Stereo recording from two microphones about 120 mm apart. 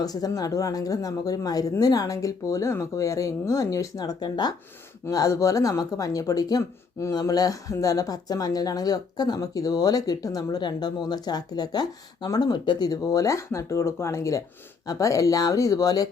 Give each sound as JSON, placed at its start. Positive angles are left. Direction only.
{"t": 0.0, "sound": "speech", "side_deg": 30}